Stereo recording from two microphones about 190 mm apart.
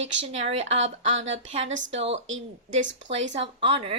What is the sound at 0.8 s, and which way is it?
Speech, 80° right.